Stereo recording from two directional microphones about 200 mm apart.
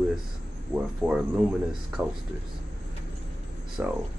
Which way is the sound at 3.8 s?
5° right (ahead or behind).